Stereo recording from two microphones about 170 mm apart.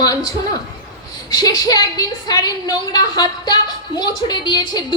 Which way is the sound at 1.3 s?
20° left (ahead or behind).